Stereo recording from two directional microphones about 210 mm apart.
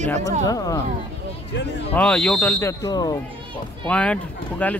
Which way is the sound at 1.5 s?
55° left (ahead or behind).